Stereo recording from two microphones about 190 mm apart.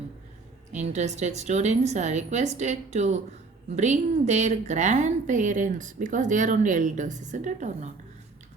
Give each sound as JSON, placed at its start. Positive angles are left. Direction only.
{"t": 0.7, "sound": "a woman's voice", "side_deg": -40}